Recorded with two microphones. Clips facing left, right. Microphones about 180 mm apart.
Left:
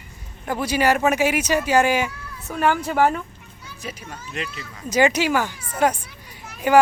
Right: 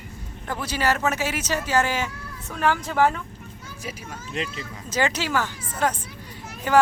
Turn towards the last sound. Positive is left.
turn(degrees=10)  # may be behind; listen again after turning